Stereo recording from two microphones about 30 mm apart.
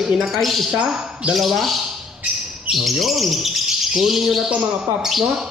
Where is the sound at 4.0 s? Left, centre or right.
Centre.